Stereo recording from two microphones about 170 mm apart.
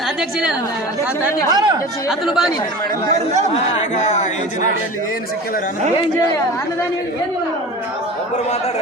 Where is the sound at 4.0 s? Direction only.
45° left (ahead or behind).